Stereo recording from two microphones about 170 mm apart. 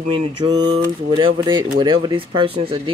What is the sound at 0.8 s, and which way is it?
Speech, 25° right (ahead or behind).